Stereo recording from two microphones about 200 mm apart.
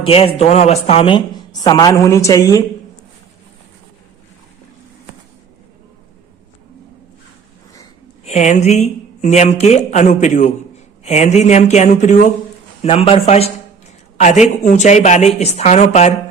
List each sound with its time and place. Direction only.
0.0 s a woman's voice: 30° left (ahead or behind)
8.2 s speech: 35° left (ahead or behind)